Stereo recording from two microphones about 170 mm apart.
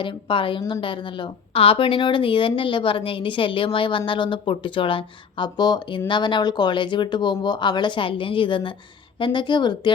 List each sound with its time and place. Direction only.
0.0 s a woman's voice: 30° left (ahead or behind)